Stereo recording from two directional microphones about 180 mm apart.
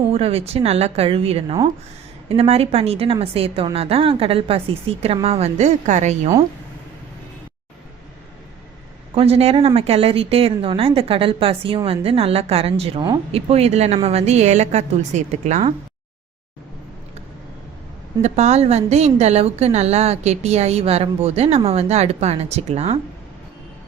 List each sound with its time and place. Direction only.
0.1 s a woman's voice: 35° right (ahead or behind)
9.1 s a woman's voice: 35° right (ahead or behind)
18.2 s a woman's voice: 40° right (ahead or behind)